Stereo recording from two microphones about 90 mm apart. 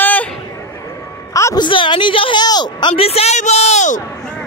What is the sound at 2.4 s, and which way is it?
Speech, 50° left (ahead or behind).